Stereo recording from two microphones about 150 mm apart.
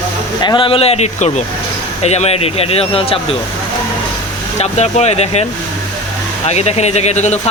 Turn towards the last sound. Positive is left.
turn(degrees=50)  # may be behind; listen again after turning